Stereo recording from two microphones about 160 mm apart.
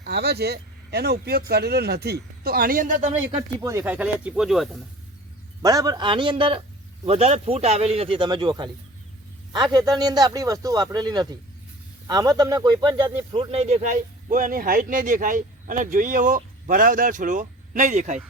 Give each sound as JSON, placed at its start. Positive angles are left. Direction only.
{"t": 0.0, "sound": "speech", "side_deg": -90}
{"t": 3.3, "sound": "speech", "side_deg": -20}
{"t": 5.6, "sound": "speech", "side_deg": -25}